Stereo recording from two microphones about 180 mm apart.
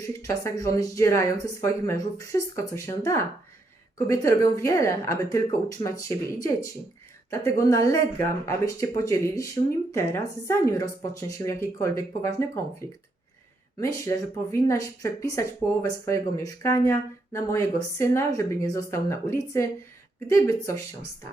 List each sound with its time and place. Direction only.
0.0 s a woman's voice: 20° left (ahead or behind)
13.7 s speech: 20° left (ahead or behind)